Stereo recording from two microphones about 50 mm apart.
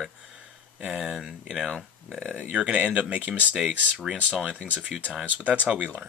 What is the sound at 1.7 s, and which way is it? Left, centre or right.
Speech, centre.